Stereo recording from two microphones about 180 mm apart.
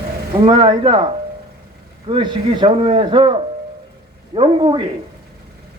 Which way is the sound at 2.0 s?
25° right (ahead or behind).